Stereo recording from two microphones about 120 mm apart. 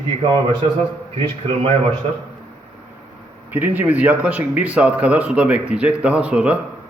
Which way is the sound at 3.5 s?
15° right (ahead or behind).